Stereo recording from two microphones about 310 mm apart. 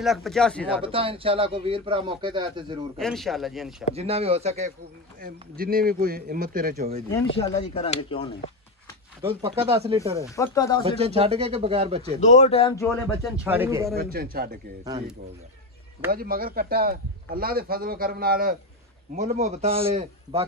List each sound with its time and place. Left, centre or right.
0.0 s speech: centre
0.8 s a man's voice: centre
3.0 s speech: centre
3.9 s speech: centre
7.3 s speech: centre
9.4 s speech: centre
10.3 s speech: centre
10.8 s speech: centre
12.2 s speech: left
13.4 s a man's voice: centre
13.9 s speech: right
16.1 s speech: right